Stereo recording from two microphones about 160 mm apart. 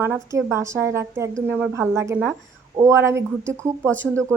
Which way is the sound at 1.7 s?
15° right (ahead or behind).